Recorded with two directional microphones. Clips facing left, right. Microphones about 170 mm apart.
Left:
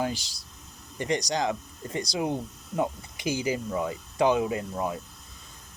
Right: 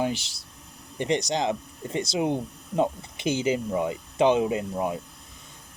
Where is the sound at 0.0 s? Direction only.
20° right (ahead or behind).